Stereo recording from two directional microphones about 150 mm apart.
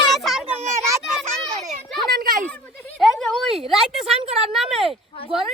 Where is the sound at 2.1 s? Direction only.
75° right (ahead or behind).